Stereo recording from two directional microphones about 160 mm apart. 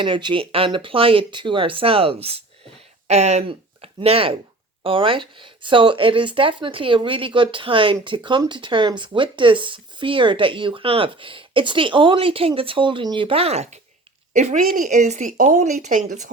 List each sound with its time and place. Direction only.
0.0 s speech: 30° right (ahead or behind); by 16.3 s 55° right (ahead or behind)